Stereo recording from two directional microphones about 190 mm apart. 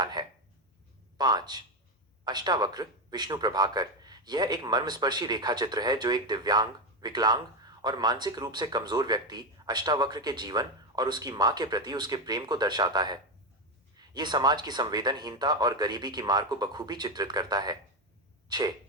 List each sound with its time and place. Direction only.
0.0 s chopping: 20° right (ahead or behind)
1.2 s speech: 20° right (ahead or behind)
18.4 s a sound: 20° right (ahead or behind)